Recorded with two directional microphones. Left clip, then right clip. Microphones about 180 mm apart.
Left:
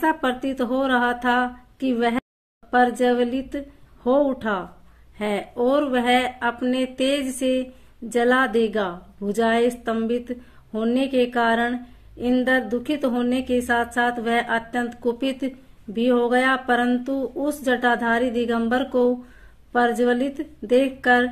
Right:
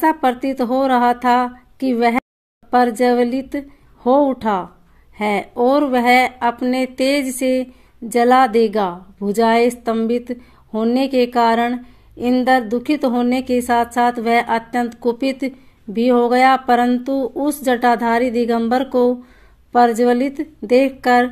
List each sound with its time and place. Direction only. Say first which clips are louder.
0.0 s a woman's voice: right 6 dB; 30° right (ahead or behind)